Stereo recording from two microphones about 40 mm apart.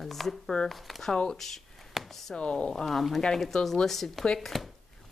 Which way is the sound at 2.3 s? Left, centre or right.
Left.